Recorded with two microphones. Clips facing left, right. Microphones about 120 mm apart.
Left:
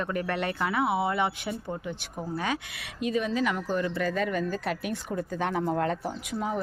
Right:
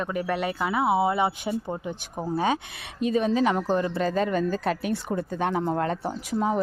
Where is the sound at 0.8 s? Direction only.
25° right (ahead or behind).